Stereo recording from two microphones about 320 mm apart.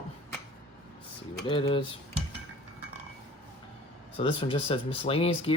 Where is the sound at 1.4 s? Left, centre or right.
Centre.